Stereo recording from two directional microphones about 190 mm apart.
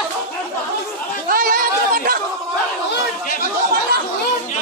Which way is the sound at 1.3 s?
45° right (ahead or behind).